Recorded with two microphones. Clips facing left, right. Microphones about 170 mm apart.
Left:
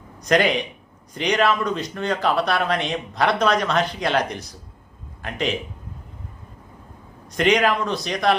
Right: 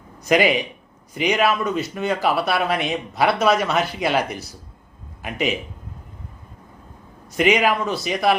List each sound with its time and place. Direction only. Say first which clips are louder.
0.2 s speech: right 1 dB; 5° right (ahead or behind)
7.3 s speech: right 1 dB; 5° right (ahead or behind)